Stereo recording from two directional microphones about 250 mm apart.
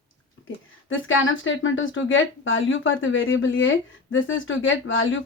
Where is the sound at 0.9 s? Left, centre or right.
Left.